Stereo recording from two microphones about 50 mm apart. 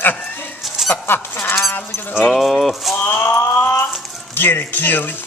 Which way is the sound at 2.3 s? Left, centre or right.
Centre.